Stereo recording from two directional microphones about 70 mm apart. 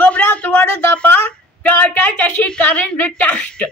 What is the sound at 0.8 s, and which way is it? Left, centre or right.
Speech, left.